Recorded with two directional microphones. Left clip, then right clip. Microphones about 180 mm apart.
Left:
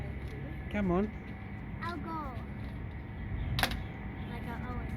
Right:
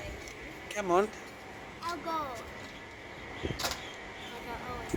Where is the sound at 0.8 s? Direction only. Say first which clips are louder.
Right 5 dB; 10° right (ahead or behind).